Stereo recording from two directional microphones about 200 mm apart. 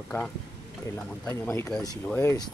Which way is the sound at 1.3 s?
10° left (ahead or behind).